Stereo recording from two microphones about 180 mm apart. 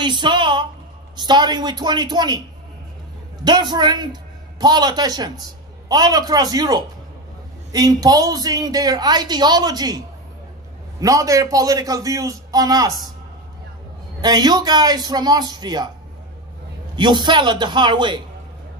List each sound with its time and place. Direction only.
0.0 s a sound: 25° right (ahead or behind)
1.1 s a woman's voice: 25° right (ahead or behind)
3.4 s a man's voice: 25° right (ahead or behind)
14.2 s a woman's voice: 20° right (ahead or behind)
16.9 s a woman's voice: 25° right (ahead or behind)